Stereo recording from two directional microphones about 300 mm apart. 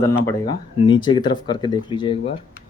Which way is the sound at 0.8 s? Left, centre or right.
Centre.